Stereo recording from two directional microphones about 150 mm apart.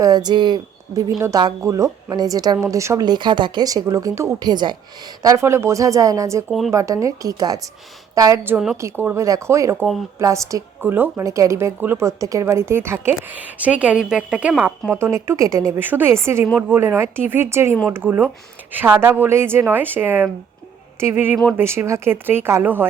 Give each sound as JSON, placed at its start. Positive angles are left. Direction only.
{"t": 0.0, "sound": "a woman's voice", "side_deg": -25}